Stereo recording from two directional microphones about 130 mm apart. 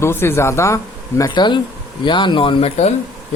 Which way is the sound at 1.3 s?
35° left (ahead or behind).